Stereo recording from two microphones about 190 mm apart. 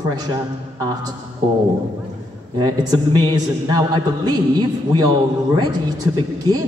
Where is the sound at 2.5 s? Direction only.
20° right (ahead or behind).